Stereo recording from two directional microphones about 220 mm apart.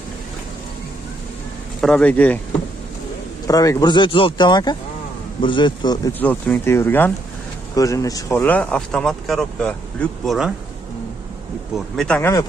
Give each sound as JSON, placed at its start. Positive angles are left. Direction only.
{"t": 1.8, "sound": "speech", "side_deg": 5}
{"t": 3.4, "sound": "speech", "side_deg": 15}
{"t": 11.7, "sound": "speech", "side_deg": 5}